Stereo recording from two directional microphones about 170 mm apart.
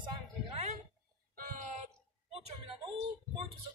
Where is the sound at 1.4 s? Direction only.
55° right (ahead or behind).